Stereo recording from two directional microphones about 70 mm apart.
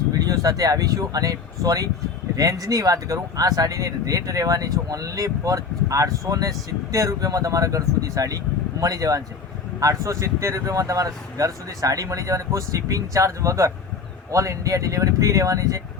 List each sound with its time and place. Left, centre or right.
0.3 s speech: right